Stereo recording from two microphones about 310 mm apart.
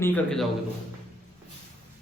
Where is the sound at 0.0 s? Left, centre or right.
Centre.